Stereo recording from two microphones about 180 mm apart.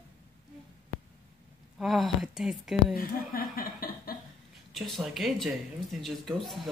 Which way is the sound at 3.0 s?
55° left (ahead or behind).